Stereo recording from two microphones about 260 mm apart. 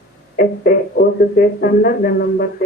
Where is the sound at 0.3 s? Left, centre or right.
Left.